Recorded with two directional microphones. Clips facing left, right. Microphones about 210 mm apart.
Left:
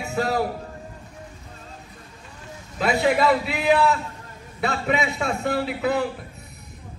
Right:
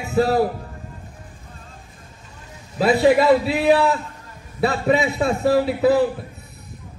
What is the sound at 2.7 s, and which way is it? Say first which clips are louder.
A man's voice: right 5 dB; 35° right (ahead or behind).